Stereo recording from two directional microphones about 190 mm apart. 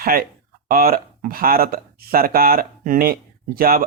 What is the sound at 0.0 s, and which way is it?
Speech, 50° right (ahead or behind).